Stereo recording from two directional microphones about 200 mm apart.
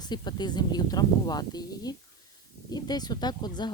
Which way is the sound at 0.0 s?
20° left (ahead or behind).